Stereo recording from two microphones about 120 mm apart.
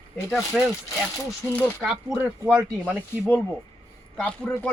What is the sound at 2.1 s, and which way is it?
Speech, 20° right (ahead or behind).